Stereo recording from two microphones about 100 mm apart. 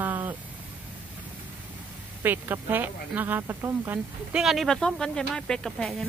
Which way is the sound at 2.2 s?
20° right (ahead or behind).